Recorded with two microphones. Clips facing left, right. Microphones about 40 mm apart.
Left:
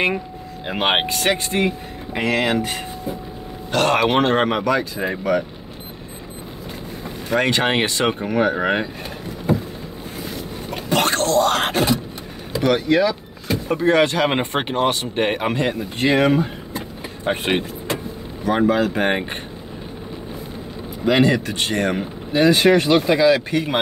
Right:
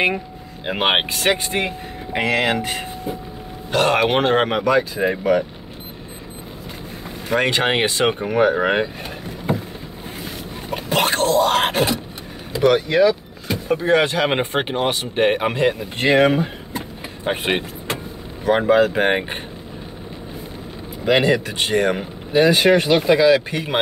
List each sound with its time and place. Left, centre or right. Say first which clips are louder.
0.7 s speech: right 1 dB; centre
1.3 s speech: left 1 dB; right
3.7 s speech: even; centre
7.3 s speech: even; centre
9.5 s boat: left 2 dB; right
10.7 s a sound: even; centre
12.5 s speech: right 2 dB; centre
16.0 s speech: right 1 dB; centre
21.0 s speech: even; centre